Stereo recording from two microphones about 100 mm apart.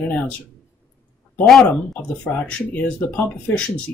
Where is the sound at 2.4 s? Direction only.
15° left (ahead or behind).